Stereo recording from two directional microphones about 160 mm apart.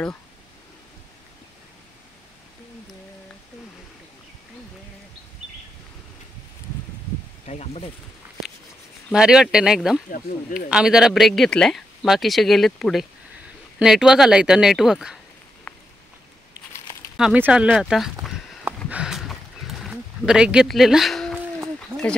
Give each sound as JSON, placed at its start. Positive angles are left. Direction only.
{"t": 7.4, "sound": "speech", "side_deg": 40}
{"t": 9.1, "sound": "speech", "side_deg": -5}
{"t": 10.1, "sound": "speech", "side_deg": 60}
{"t": 10.7, "sound": "speech", "side_deg": -5}
{"t": 15.7, "sound": "a sound", "side_deg": 10}
{"t": 17.2, "sound": "speech", "side_deg": -10}
{"t": 18.2, "sound": "a sound", "side_deg": -5}